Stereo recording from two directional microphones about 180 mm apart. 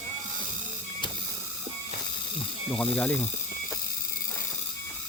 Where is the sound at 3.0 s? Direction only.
5° left (ahead or behind).